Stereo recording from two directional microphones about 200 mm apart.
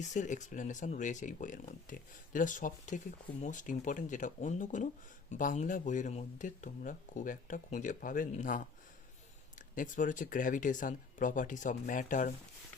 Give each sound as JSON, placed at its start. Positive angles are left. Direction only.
{"t": 0.0, "sound": "speech", "side_deg": 40}